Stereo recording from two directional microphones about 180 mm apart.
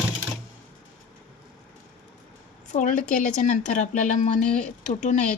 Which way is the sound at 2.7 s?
40° left (ahead or behind).